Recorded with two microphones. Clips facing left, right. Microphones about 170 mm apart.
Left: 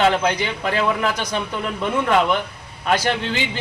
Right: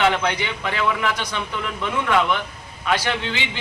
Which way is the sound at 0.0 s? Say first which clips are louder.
Left 2 dB; 35° left (ahead or behind).